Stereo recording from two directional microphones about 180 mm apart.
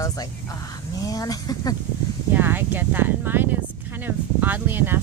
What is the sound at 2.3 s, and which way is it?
Speech, 10° right (ahead or behind).